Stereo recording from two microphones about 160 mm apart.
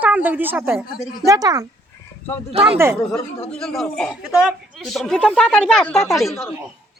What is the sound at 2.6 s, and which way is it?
Speech, 40° right (ahead or behind).